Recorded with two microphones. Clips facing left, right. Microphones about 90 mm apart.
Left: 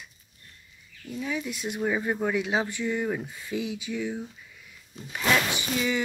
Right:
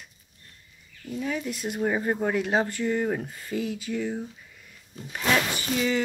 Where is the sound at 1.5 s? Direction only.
45° right (ahead or behind).